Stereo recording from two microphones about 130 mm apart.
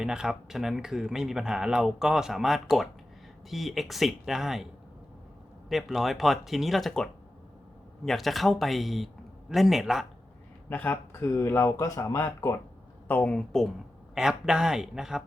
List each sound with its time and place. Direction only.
0.0 s speech: 5° right (ahead or behind)
5.6 s speech: centre (ahead or behind)
10.7 s speech: 15° left (ahead or behind)
13.1 s speech: 10° left (ahead or behind)
14.2 s speech: 5° right (ahead or behind)